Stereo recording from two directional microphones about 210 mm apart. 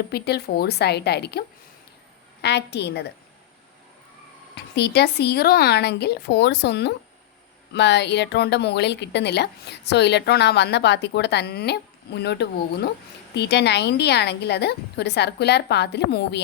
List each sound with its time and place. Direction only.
0.1 s a woman's voice: 50° left (ahead or behind)
4.5 s a woman's voice: 50° left (ahead or behind)